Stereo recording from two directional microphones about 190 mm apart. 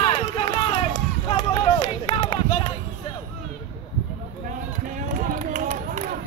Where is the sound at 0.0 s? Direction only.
30° left (ahead or behind).